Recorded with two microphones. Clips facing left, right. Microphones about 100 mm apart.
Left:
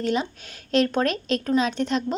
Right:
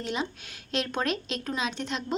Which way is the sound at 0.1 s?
40° left (ahead or behind).